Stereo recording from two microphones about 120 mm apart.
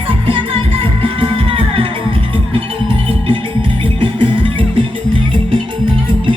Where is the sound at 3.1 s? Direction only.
50° right (ahead or behind).